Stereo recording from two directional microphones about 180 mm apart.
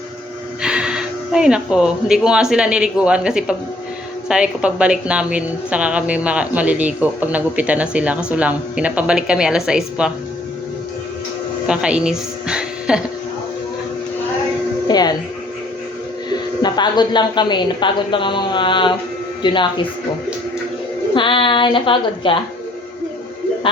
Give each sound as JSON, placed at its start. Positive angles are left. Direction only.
{"t": 0.6, "sound": "a woman's voice", "side_deg": -5}
{"t": 11.6, "sound": "a woman's voice", "side_deg": -5}
{"t": 14.8, "sound": "music", "side_deg": 20}
{"t": 16.6, "sound": "a woman's voice", "side_deg": 25}
{"t": 21.2, "sound": "a woman's voice", "side_deg": 30}